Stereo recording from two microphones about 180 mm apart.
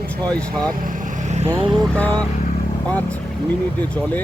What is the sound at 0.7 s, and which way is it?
Vehicle, 50° right (ahead or behind).